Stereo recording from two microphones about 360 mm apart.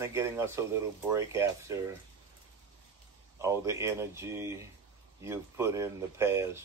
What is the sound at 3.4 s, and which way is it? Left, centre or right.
Speech, centre.